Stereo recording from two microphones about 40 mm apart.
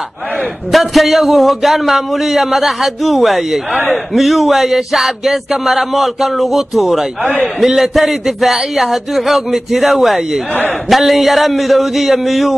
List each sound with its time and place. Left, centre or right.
0.7 s speech: centre